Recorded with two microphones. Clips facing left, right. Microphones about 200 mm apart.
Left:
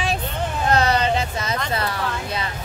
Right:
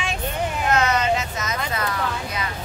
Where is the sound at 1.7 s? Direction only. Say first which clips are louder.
Left 1 dB; 30° left (ahead or behind).